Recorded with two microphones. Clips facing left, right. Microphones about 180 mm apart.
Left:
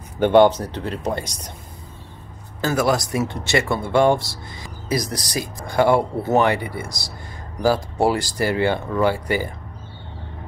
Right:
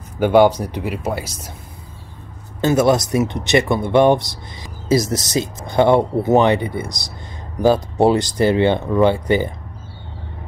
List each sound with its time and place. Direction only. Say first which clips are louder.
0.2 s speech: right 1 dB; 10° right (ahead or behind)
2.6 s speech: right 5 dB; 20° right (ahead or behind)